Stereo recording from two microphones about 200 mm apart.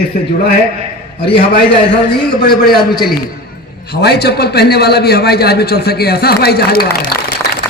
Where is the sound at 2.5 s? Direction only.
50° left (ahead or behind).